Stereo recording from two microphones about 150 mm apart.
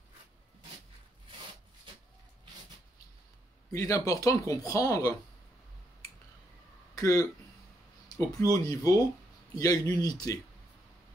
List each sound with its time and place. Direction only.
3.7 s speech: 20° left (ahead or behind)
7.0 s speech: 20° left (ahead or behind)